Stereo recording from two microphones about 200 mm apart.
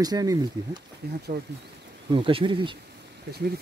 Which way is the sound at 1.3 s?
50° right (ahead or behind).